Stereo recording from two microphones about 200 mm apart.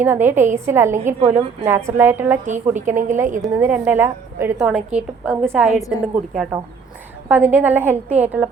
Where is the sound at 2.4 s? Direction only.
35° right (ahead or behind).